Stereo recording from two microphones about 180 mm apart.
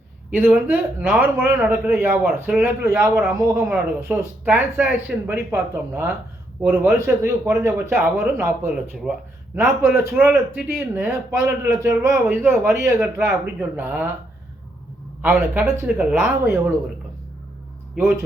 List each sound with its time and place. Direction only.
0.3 s speech: 10° right (ahead or behind)
15.2 s speech: 10° right (ahead or behind)